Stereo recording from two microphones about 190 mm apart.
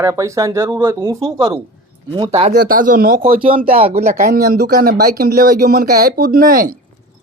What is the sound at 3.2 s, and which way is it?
Speech, 30° right (ahead or behind).